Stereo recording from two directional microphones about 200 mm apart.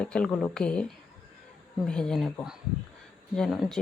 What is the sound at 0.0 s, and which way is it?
Speech, 5° left (ahead or behind).